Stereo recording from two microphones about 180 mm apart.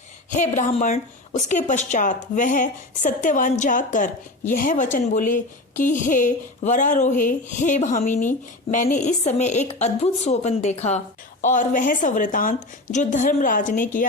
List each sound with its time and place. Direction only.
0.3 s a woman's voice: 40° left (ahead or behind)